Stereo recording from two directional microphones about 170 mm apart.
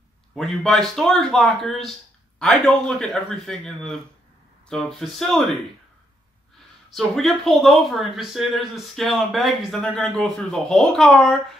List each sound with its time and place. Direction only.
0.3 s speech: 5° left (ahead or behind)
6.9 s speech: centre (ahead or behind)